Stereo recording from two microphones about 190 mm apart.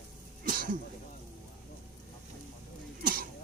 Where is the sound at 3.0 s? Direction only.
50° right (ahead or behind).